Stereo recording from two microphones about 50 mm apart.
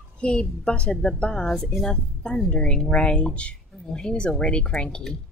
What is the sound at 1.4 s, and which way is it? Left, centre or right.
Rub, centre.